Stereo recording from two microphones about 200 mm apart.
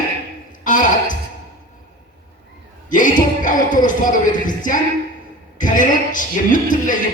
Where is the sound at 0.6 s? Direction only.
40° left (ahead or behind).